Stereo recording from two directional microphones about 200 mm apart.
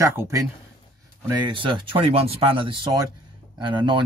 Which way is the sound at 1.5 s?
25° right (ahead or behind).